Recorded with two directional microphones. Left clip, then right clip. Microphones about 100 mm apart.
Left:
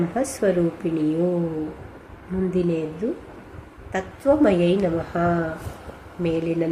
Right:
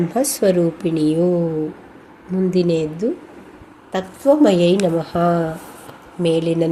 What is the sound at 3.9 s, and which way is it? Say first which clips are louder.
A woman's voice: right 5 dB; 45° right (ahead or behind).